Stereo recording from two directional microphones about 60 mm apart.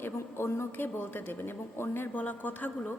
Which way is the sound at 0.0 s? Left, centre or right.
Left.